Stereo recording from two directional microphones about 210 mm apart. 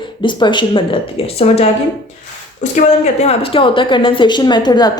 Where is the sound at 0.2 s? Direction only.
20° left (ahead or behind).